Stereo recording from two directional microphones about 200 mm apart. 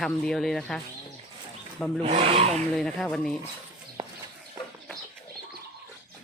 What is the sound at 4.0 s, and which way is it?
Chicken, 30° right (ahead or behind).